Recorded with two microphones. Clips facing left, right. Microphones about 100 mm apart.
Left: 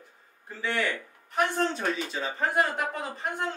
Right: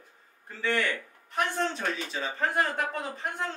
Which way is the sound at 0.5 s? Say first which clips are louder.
Right 1 dB; 10° left (ahead or behind).